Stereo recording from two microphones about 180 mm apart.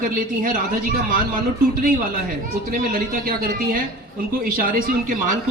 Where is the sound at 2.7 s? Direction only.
50° right (ahead or behind).